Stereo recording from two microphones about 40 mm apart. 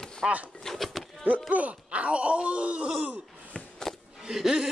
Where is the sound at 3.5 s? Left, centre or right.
Left.